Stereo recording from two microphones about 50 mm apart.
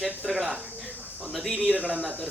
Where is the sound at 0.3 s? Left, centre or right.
Centre.